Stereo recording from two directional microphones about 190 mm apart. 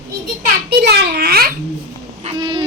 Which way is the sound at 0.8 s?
60° right (ahead or behind).